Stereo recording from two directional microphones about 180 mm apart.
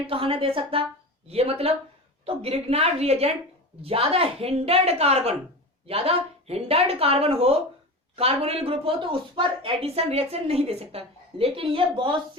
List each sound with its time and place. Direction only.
0.1 s speech: 30° right (ahead or behind)